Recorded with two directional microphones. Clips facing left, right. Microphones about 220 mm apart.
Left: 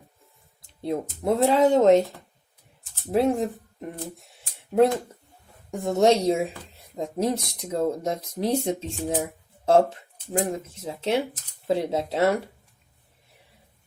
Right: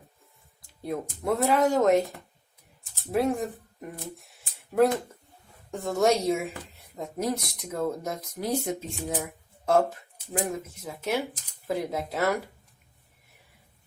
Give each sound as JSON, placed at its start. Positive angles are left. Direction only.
{"t": 0.8, "sound": "speech", "side_deg": 25}
{"t": 3.1, "sound": "speech", "side_deg": 25}
{"t": 4.4, "sound": "a sound", "side_deg": 25}
{"t": 5.7, "sound": "speech", "side_deg": 20}